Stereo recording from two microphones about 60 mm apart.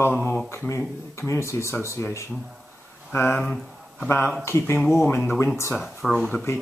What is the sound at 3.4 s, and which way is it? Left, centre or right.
Speech, centre.